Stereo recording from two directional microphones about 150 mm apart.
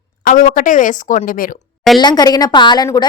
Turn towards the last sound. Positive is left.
turn(degrees=25)  # may be behind; listen again after turning